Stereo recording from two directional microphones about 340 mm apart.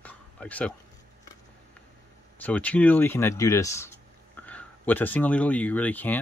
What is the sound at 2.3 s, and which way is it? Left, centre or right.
Speech, centre.